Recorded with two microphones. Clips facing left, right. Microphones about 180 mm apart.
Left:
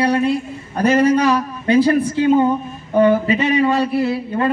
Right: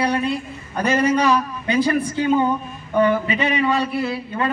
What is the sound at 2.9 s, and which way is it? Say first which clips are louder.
Speech: left 4 dB; 35° left (ahead or behind).